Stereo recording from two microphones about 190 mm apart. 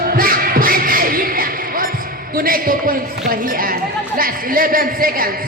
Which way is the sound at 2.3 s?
50° right (ahead or behind).